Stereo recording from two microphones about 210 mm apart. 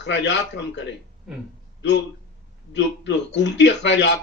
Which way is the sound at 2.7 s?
55° left (ahead or behind).